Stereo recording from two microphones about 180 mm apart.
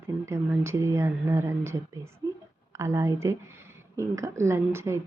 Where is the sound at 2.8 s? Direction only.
15° right (ahead or behind).